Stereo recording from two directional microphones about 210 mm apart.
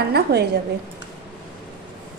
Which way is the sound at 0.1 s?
50° right (ahead or behind).